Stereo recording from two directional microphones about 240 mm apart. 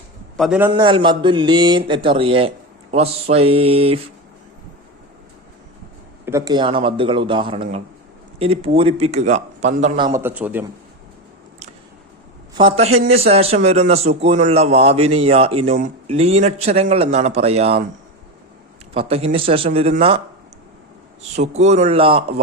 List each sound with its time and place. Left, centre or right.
0.3 s a man's voice: centre
0.7 s a man's voice: right
6.2 s a man's voice: centre; by 10.1 s right
10.1 s a man's voice: centre
12.5 s a man's voice: right
18.9 s a man's voice: right
21.3 s a man's voice: right